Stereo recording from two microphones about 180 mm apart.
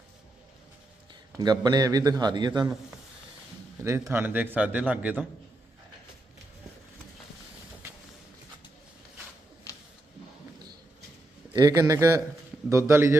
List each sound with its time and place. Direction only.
1.4 s a man's voice: 20° right (ahead or behind)
3.8 s a man's voice: 15° right (ahead or behind)
11.5 s a man's voice: 20° right (ahead or behind)